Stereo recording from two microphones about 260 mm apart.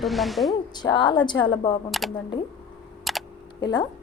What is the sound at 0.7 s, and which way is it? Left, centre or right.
A woman's voice, centre.